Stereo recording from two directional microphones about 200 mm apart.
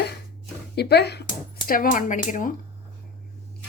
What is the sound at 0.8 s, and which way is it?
Speech, 55° left (ahead or behind).